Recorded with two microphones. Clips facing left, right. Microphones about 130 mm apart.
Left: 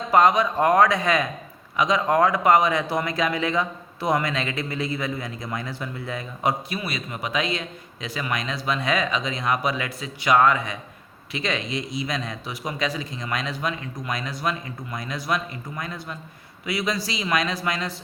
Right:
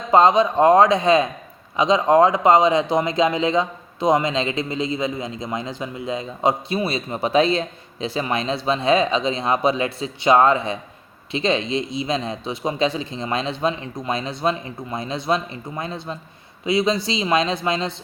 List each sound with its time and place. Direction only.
0.1 s speech: 25° right (ahead or behind)